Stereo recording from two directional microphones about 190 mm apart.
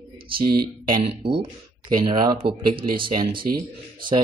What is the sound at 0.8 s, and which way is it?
A man's voice, 25° right (ahead or behind).